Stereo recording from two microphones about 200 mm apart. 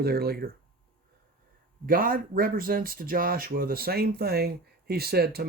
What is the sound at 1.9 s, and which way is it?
Speech, 45° right (ahead or behind).